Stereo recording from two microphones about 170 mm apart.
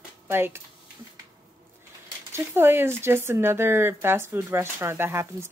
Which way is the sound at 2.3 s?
15° right (ahead or behind).